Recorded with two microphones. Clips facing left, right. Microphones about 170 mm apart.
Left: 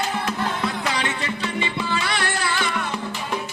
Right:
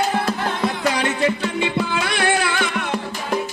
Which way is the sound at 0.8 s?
50° right (ahead or behind).